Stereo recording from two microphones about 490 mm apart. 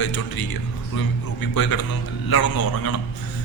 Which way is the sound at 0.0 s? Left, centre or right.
Left.